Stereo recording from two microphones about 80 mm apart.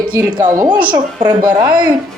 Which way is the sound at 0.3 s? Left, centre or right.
Right.